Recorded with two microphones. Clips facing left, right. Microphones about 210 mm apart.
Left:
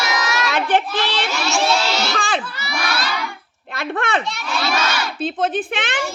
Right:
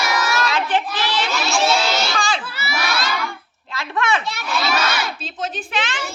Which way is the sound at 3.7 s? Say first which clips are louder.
Even; 55° left (ahead or behind).